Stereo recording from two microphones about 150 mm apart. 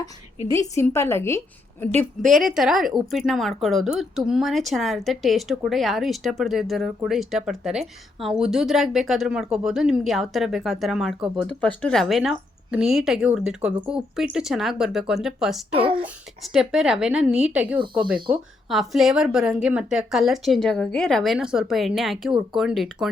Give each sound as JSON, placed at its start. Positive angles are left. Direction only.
{"t": 0.5, "sound": "a woman's voice", "side_deg": 20}
{"t": 2.3, "sound": "speech", "side_deg": 0}
{"t": 15.7, "sound": "speech", "side_deg": -35}
{"t": 16.4, "sound": "speech", "side_deg": 0}